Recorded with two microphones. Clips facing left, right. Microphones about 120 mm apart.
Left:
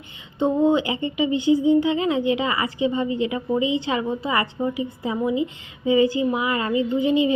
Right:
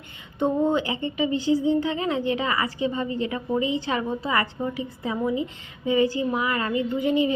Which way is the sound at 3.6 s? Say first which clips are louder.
Left 3 dB; 40° right (ahead or behind).